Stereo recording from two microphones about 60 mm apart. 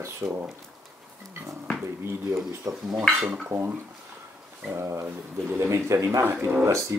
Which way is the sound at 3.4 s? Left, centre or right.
Right.